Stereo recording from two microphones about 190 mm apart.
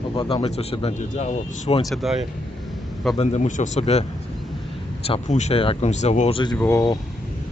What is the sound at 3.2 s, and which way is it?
Speech, 35° left (ahead or behind).